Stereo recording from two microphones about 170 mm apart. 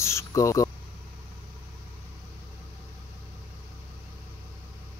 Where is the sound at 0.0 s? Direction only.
15° left (ahead or behind).